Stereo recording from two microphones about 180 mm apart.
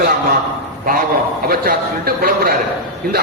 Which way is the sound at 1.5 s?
55° right (ahead or behind).